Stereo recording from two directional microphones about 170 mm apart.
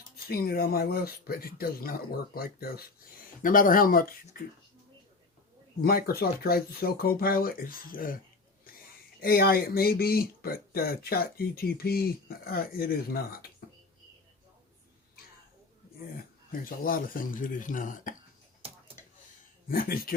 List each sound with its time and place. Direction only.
0.3 s speech: 65° left (ahead or behind)
5.8 s speech: 60° left (ahead or behind)
9.2 s speech: 60° left (ahead or behind)
16.5 s speech: 55° left (ahead or behind)
19.6 s speech: 55° left (ahead or behind)